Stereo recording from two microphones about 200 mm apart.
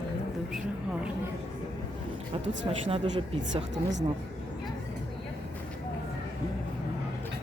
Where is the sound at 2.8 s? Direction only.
25° right (ahead or behind).